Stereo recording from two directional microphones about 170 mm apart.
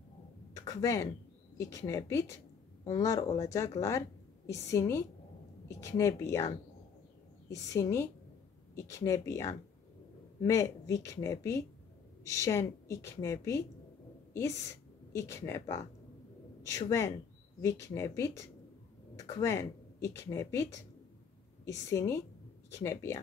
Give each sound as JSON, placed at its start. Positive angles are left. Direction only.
{"t": 0.6, "sound": "a sound", "side_deg": 20}
{"t": 1.6, "sound": "a woman's voice", "side_deg": 20}
{"t": 7.7, "sound": "a woman's voice", "side_deg": 15}
{"t": 21.6, "sound": "a woman's voice", "side_deg": 15}